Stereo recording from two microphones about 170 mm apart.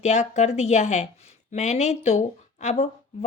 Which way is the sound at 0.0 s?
45° left (ahead or behind).